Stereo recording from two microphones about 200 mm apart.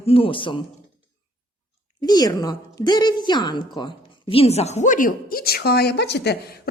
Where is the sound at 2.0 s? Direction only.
20° left (ahead or behind).